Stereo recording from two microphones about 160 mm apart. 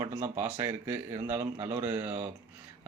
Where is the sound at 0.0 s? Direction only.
15° right (ahead or behind).